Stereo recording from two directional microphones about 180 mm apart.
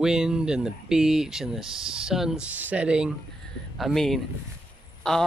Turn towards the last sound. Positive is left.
turn(degrees=5)  # may be behind; listen again after turning